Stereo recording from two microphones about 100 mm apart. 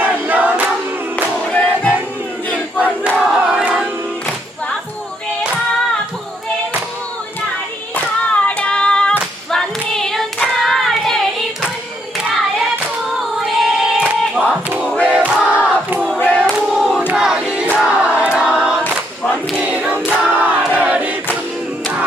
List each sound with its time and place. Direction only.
0.0 s choir: 15° right (ahead or behind)
1.1 s music: 15° left (ahead or behind)
2.7 s crowd: 15° right (ahead or behind)
7.9 s child singing: 15° left (ahead or behind)
13.4 s child singing: 5° right (ahead or behind)
15.0 s crowd: 15° right (ahead or behind)
16.1 s choir: 15° left (ahead or behind)
16.4 s battle cry: centre (ahead or behind)
17.2 s crowd: 5° right (ahead or behind)
19.5 s choir: 15° right (ahead or behind)